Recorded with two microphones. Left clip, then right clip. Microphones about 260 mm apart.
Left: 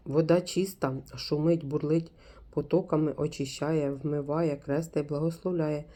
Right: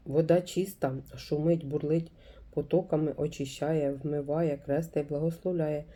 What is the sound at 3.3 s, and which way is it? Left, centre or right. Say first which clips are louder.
Speech: left 2 dB; centre.